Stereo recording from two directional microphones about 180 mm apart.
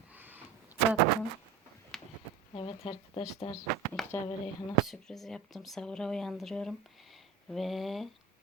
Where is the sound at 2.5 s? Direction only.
30° left (ahead or behind).